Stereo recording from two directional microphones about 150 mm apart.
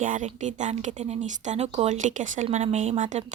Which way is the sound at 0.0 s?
60° right (ahead or behind).